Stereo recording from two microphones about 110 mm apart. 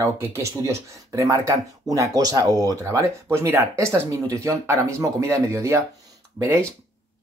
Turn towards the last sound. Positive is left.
turn(degrees=-25)  # may be behind; listen again after turning